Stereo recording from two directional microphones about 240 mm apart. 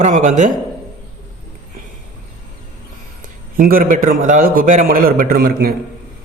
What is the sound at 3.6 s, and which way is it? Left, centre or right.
A man's voice, right.